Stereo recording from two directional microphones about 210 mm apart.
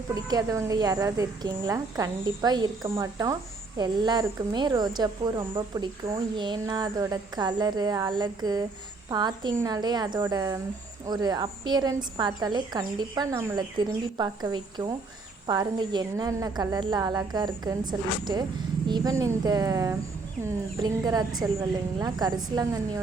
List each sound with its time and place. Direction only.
0.1 s a woman's voice: 15° right (ahead or behind)